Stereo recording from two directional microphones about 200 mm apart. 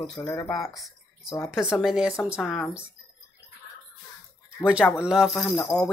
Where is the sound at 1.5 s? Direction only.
5° right (ahead or behind).